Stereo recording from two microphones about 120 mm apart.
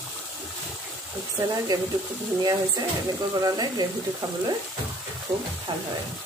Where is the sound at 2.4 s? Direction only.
35° right (ahead or behind).